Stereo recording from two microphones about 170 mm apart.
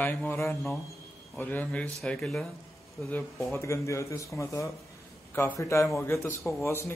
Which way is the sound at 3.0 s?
15° left (ahead or behind).